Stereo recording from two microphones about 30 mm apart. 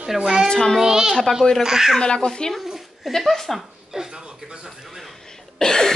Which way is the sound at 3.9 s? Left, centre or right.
Right.